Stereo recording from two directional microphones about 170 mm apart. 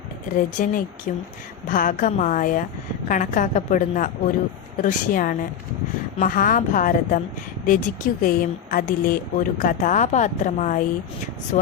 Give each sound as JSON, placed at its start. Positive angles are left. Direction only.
{"t": 0.3, "sound": "speech", "side_deg": 50}